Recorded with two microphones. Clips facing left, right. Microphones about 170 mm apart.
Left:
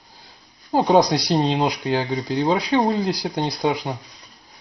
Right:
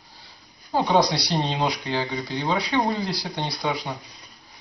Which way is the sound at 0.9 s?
45° left (ahead or behind).